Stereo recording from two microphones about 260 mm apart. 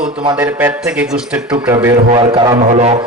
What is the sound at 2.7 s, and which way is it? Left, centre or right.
Music, right.